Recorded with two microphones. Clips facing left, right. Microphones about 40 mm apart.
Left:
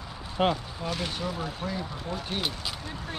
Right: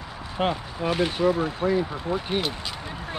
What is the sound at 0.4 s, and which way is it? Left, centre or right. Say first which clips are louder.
Speech: even; centre.